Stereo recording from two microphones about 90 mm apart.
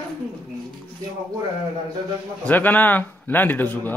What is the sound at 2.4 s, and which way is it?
Speech, 20° left (ahead or behind).